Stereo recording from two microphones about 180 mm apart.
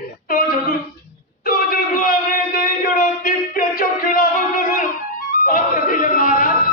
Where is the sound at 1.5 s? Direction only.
50° left (ahead or behind).